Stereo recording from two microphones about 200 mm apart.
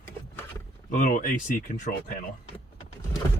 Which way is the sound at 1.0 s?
40° left (ahead or behind).